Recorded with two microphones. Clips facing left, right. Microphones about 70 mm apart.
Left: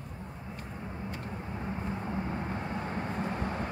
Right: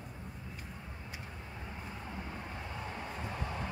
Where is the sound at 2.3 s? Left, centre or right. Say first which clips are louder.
Left 8 dB; left.